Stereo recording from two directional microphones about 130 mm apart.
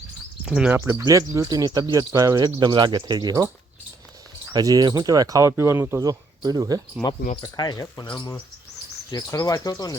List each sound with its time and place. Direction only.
0.4 s speech: 5° right (ahead or behind)
0.9 s speech: 25° right (ahead or behind)
4.5 s speech: 30° right (ahead or behind)
7.4 s speech: 30° left (ahead or behind)